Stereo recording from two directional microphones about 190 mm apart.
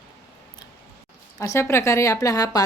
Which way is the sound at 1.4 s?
15° left (ahead or behind).